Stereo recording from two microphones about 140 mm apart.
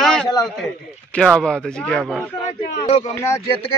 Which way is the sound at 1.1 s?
5° left (ahead or behind).